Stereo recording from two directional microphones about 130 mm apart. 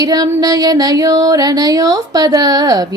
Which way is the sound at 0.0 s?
30° right (ahead or behind).